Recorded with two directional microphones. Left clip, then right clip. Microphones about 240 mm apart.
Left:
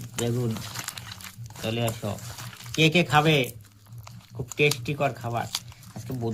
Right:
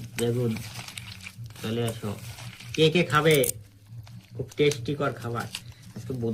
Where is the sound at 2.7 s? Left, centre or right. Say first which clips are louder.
Left 1 dB; left.